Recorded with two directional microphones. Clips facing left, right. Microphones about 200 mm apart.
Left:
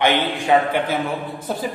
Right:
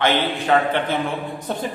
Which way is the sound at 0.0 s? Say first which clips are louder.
Left 1 dB; 15° left (ahead or behind).